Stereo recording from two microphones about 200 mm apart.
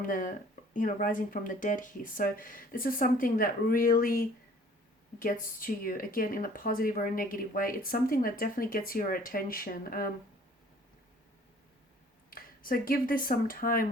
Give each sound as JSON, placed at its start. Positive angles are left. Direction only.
{"t": 0.0, "sound": "speech", "side_deg": 40}
{"t": 12.3, "sound": "speech", "side_deg": 45}